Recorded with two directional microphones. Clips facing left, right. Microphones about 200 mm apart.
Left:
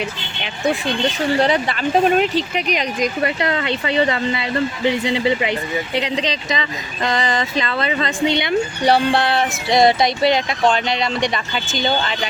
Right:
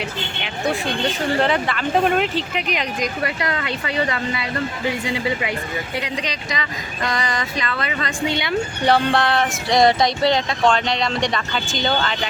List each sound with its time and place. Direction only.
1.4 s speech: 15° left (ahead or behind)